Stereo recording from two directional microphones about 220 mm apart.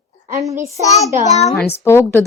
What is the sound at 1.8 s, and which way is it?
Speech, 10° left (ahead or behind).